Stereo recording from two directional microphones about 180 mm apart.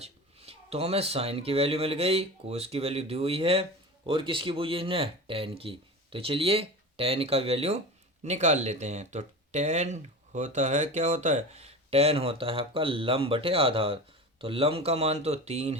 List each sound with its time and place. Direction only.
0.0 s speech: 35° right (ahead or behind)